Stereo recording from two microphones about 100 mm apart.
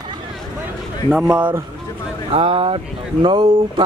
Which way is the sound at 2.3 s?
65° right (ahead or behind).